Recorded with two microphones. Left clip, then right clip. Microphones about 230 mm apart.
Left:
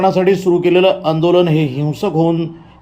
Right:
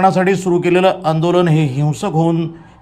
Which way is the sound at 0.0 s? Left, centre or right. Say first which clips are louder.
Left 1 dB; centre.